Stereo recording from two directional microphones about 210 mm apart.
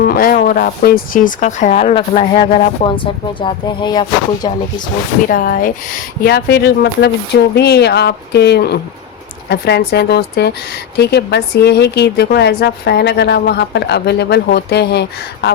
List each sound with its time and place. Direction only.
0.0 s speech: 45° left (ahead or behind); by 4.6 s 20° left (ahead or behind)
5.3 s speech: 45° left (ahead or behind)